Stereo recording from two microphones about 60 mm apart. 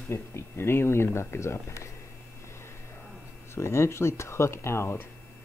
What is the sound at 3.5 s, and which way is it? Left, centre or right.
Speech, left.